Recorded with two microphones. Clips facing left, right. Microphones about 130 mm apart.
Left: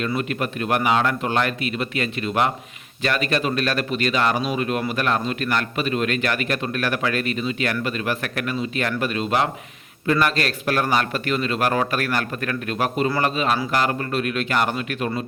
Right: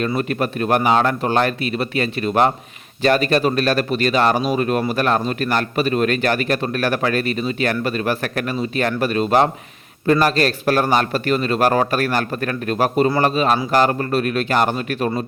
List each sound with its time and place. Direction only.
0.2 s a man's voice: 40° right (ahead or behind)